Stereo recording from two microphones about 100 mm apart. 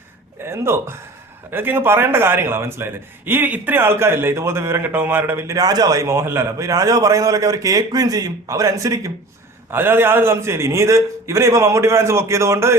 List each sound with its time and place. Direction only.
0.4 s a man's voice: 25° right (ahead or behind)
9.6 s a man's voice: 20° right (ahead or behind)